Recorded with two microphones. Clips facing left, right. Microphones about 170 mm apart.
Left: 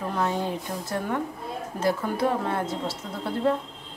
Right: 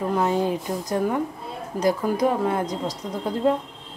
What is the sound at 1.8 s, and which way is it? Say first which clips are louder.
Speech: right 4 dB; 15° right (ahead or behind).